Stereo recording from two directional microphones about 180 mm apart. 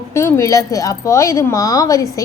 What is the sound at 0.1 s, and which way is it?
A woman's voice, 15° left (ahead or behind).